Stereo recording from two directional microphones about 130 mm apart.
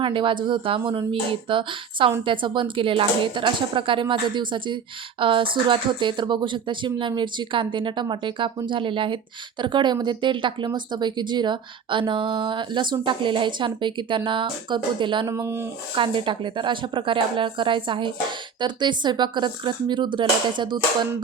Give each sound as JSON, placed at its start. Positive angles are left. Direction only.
{"t": 0.0, "sound": "speech", "side_deg": -40}
{"t": 15.3, "sound": "speech", "side_deg": -20}
{"t": 16.0, "sound": "speech", "side_deg": -40}